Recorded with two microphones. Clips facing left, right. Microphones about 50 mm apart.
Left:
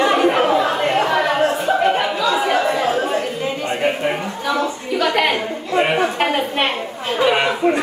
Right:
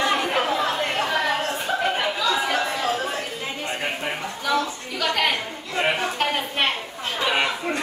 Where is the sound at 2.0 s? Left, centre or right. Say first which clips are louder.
Left 5 dB; centre.